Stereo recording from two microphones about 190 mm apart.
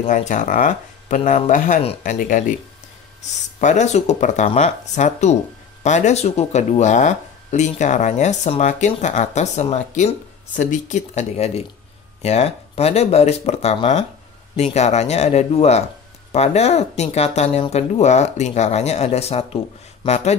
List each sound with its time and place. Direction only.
0.0 s speech: 40° left (ahead or behind)
3.6 s speech: 40° left (ahead or behind)